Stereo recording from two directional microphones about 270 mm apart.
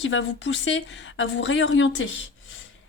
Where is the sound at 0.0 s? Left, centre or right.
Left.